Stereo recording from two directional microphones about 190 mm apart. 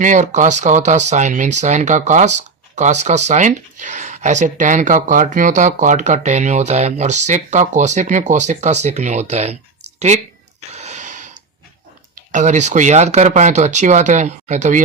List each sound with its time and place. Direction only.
0.0 s speech: 40° right (ahead or behind)
10.7 s gasp: 35° right (ahead or behind)
12.3 s speech: 40° right (ahead or behind)